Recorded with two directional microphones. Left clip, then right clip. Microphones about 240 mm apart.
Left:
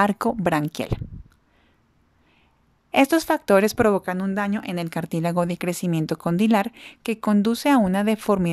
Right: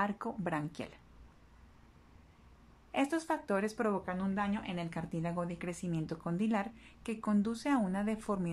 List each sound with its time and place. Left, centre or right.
0.0 s speech: left
2.9 s speech: left